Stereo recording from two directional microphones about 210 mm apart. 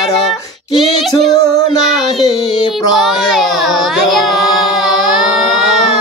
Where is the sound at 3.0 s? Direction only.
Centre (ahead or behind).